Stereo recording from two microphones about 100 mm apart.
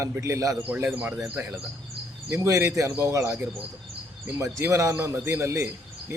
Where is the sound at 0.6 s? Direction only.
20° right (ahead or behind).